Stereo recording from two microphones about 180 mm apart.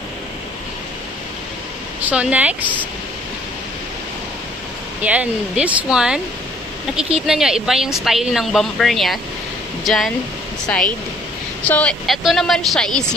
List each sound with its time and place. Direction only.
2.0 s speech: 10° right (ahead or behind)
5.0 s speech: 5° right (ahead or behind)
7.2 s a woman's voice: 5° right (ahead or behind)